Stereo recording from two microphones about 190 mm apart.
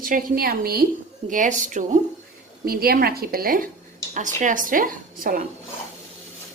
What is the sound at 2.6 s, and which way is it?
A woman's voice, 50° right (ahead or behind).